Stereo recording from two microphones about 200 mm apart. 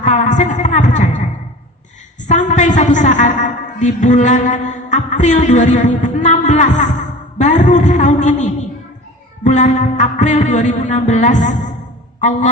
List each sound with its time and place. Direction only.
0.0 s a man's voice: 35° left (ahead or behind)
2.2 s a man's voice: 35° left (ahead or behind)